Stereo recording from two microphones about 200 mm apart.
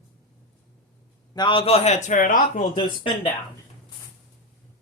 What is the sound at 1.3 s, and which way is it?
A man's voice, 25° left (ahead or behind).